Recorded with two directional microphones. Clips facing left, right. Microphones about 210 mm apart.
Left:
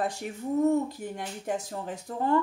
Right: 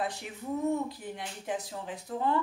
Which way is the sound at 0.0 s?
45° left (ahead or behind).